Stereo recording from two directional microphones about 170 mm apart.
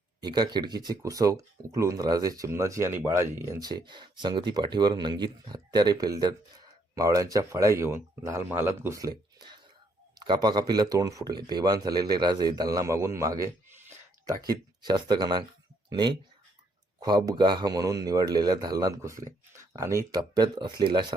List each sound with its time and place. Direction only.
0.2 s speech: 25° right (ahead or behind)